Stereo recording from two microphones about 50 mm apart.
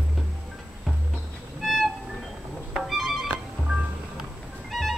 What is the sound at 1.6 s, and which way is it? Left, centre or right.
Music, centre.